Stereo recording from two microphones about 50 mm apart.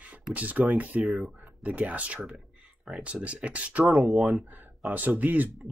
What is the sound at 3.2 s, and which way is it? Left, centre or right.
Speech, right.